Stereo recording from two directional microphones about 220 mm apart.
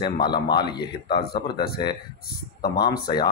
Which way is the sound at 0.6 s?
45° left (ahead or behind).